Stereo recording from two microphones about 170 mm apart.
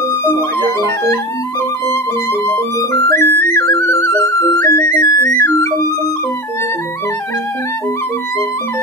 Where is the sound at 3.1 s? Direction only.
15° left (ahead or behind).